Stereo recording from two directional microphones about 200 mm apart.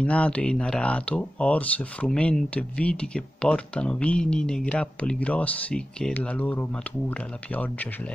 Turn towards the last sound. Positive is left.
turn(degrees=10)  # may be behind; listen again after turning